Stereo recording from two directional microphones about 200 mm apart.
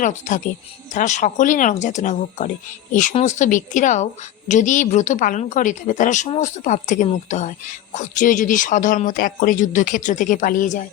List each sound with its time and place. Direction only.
0.0 s a woman's voice: 40° left (ahead or behind)